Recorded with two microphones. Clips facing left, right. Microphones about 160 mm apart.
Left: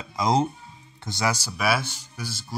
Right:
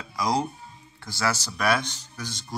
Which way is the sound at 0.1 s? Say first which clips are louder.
Left 3 dB; 20° left (ahead or behind).